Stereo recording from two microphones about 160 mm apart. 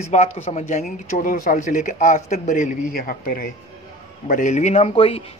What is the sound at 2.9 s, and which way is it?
Speech, 65° left (ahead or behind).